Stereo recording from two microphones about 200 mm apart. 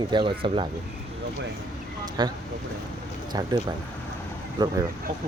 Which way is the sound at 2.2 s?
20° right (ahead or behind).